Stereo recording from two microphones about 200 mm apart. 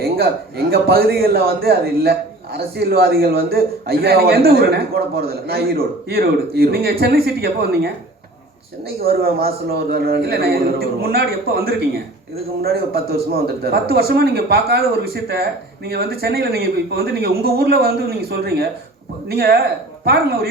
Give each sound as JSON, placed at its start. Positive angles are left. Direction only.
{"t": 0.0, "sound": "a man's voice", "side_deg": -50}
{"t": 9.0, "sound": "a man's voice", "side_deg": -50}